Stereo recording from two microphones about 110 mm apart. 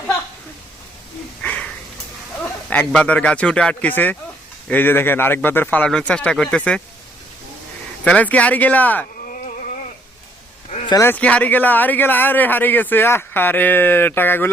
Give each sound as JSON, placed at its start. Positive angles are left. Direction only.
{"t": 1.4, "sound": "a sound", "side_deg": 10}
{"t": 2.9, "sound": "speech", "side_deg": 10}
{"t": 8.0, "sound": "speech", "side_deg": 15}
{"t": 11.0, "sound": "speech", "side_deg": 15}